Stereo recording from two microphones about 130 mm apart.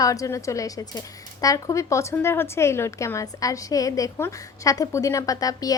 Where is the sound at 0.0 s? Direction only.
25° left (ahead or behind).